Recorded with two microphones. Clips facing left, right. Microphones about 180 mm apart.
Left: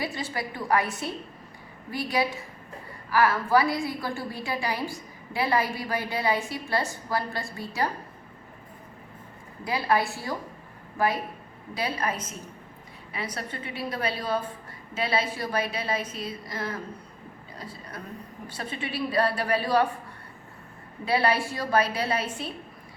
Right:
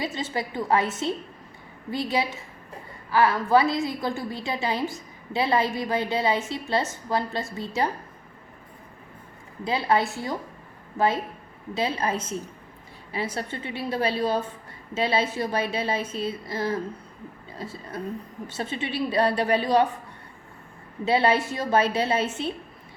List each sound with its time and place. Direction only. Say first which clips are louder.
0.0 s a woman's voice: right 2 dB; 20° right (ahead or behind)
9.6 s a woman's voice: right 2 dB; 20° right (ahead or behind)
21.0 s a woman's voice: right 3 dB; 25° right (ahead or behind)